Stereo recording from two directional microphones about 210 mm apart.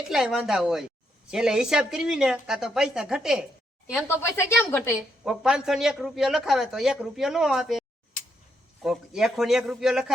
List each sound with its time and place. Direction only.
0.1 s a man's voice: centre (ahead or behind)
3.9 s a woman's voice: 10° left (ahead or behind)
4.9 s a man's voice: 5° right (ahead or behind)